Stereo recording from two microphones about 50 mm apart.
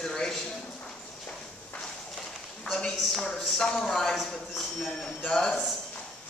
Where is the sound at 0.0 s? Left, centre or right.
Centre.